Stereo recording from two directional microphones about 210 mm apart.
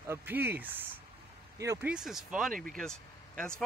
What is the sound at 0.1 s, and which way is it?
Speech, 10° right (ahead or behind).